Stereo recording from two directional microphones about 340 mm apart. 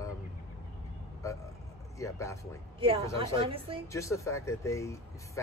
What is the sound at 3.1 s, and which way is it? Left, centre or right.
Speech, centre.